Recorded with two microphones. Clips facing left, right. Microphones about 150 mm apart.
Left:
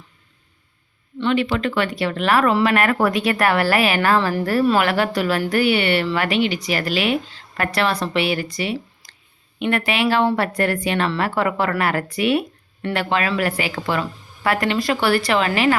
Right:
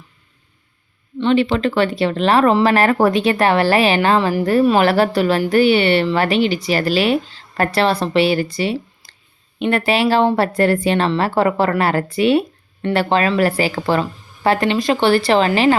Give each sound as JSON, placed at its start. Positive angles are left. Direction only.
{"t": 1.2, "sound": "speech", "side_deg": -25}
{"t": 4.8, "sound": "speech", "side_deg": -30}